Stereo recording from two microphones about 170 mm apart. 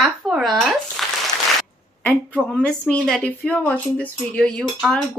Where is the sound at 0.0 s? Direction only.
Centre (ahead or behind).